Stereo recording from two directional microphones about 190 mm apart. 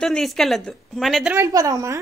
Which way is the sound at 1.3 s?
15° right (ahead or behind).